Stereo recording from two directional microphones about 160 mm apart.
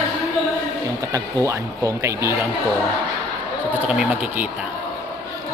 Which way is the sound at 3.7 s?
5° right (ahead or behind).